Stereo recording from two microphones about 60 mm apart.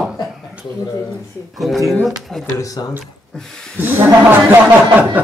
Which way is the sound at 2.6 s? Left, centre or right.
Left.